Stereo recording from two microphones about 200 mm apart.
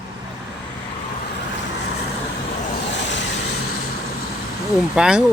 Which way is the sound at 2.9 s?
60° left (ahead or behind).